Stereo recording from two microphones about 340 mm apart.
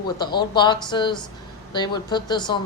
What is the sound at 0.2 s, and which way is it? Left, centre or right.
A woman's voice, centre.